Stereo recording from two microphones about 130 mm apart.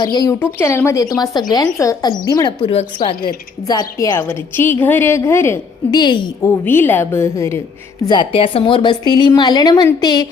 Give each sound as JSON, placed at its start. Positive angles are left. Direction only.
{"t": 0.0, "sound": "a woman's voice", "side_deg": 30}
{"t": 0.6, "sound": "a woman's voice", "side_deg": 20}
{"t": 5.9, "sound": "a woman's voice", "side_deg": 35}
{"t": 6.4, "sound": "speech", "side_deg": 15}
{"t": 8.0, "sound": "a woman's voice", "side_deg": 35}